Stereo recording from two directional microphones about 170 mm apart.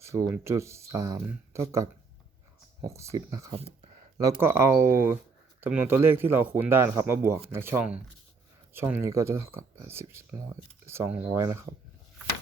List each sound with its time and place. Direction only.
0.0 s speech: 20° right (ahead or behind)
3.5 s speech: 35° right (ahead or behind)
4.2 s speech: 15° right (ahead or behind)